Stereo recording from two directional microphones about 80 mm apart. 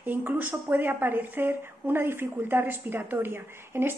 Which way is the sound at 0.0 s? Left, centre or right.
Right.